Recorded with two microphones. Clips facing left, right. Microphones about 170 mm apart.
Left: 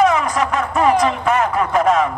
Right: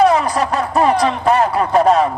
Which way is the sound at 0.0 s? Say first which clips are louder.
Right 2 dB; 35° right (ahead or behind).